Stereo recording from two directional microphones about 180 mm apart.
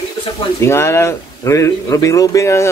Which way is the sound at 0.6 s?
15° left (ahead or behind).